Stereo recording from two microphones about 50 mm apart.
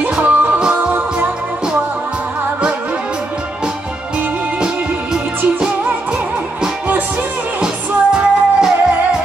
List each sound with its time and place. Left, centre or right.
0.0 s music: right
7.6 s music: centre